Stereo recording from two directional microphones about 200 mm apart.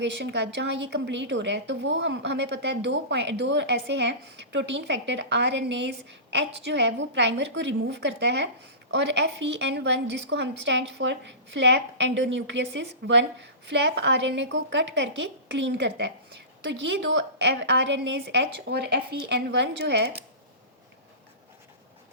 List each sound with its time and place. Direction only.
0.0 s a woman's voice: 60° right (ahead or behind)